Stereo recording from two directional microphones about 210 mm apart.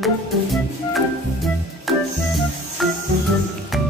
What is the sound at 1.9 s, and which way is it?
Music, centre (ahead or behind).